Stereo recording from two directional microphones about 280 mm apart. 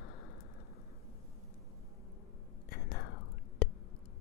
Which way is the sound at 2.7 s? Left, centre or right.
Left.